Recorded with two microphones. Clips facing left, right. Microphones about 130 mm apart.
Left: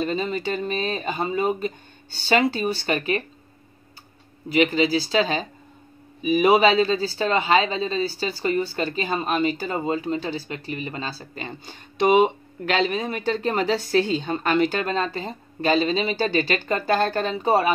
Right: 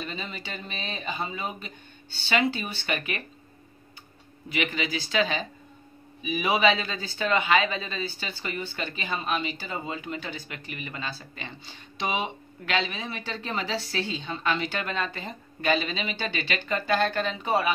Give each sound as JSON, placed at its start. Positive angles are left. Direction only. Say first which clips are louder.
{"t": 0.0, "sound": "speech", "louder": "left 12 dB", "side_deg": 45}
{"t": 4.5, "sound": "speech", "louder": "left 10 dB", "side_deg": 35}